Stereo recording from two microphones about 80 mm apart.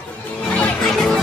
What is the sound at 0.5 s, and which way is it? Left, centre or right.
Music, centre.